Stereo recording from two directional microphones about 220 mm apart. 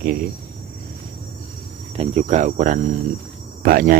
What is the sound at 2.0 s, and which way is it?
Speech, 30° right (ahead or behind).